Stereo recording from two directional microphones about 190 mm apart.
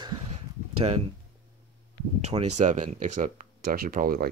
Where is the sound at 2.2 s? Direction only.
35° right (ahead or behind).